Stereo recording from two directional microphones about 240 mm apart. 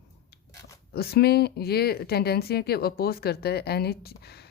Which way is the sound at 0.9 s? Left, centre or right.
Left.